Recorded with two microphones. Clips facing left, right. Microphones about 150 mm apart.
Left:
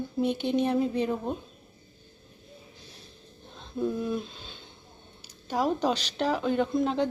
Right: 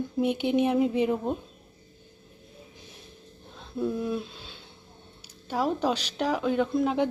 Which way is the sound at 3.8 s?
5° right (ahead or behind).